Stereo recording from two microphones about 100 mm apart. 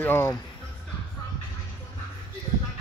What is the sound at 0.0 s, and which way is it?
Speech, 20° left (ahead or behind).